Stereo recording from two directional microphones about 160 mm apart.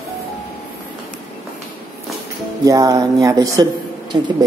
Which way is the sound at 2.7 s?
20° right (ahead or behind).